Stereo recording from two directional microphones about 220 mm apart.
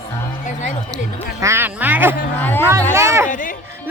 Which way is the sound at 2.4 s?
10° left (ahead or behind).